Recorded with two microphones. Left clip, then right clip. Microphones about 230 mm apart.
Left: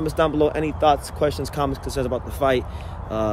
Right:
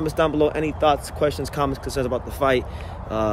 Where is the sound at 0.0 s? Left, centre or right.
Centre.